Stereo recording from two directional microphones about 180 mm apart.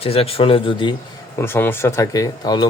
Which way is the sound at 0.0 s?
35° left (ahead or behind).